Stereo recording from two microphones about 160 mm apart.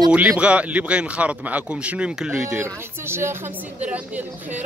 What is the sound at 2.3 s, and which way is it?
Speech, 15° right (ahead or behind).